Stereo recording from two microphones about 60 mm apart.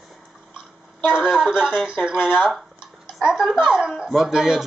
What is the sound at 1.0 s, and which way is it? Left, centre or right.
Speech, centre.